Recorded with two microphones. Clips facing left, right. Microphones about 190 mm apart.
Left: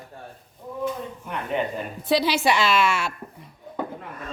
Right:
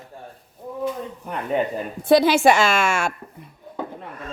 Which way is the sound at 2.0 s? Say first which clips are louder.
Right 7 dB; 50° right (ahead or behind).